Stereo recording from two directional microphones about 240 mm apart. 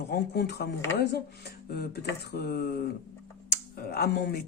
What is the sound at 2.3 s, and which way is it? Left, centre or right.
Speech, left.